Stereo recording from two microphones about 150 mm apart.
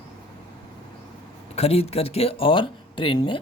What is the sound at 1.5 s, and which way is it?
Speech, 45° left (ahead or behind).